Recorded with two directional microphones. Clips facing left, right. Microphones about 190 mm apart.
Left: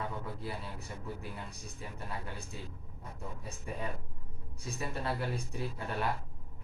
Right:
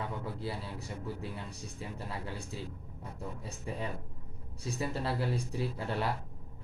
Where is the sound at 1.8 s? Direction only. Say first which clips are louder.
Right 3 dB; 25° right (ahead or behind).